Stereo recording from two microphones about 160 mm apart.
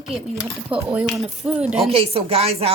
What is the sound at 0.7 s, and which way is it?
Speech, 5° right (ahead or behind).